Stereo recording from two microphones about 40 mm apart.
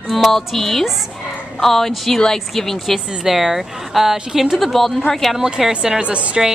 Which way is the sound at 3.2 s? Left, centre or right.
Centre.